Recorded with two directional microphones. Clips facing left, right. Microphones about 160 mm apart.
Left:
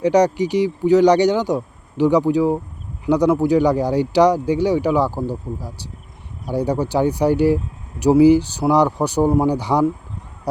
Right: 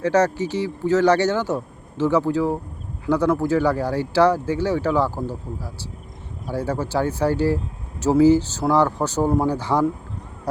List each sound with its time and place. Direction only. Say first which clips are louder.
0.0 s speech: left 4 dB; 15° left (ahead or behind)